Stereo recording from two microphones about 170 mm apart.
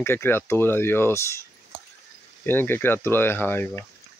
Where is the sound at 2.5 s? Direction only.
10° left (ahead or behind).